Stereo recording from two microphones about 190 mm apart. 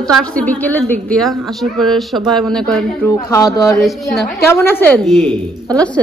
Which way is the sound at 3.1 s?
15° left (ahead or behind).